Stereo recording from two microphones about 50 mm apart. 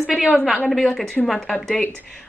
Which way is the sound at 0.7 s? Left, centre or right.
Centre.